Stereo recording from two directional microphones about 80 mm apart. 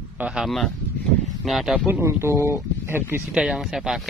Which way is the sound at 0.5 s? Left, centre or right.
Centre.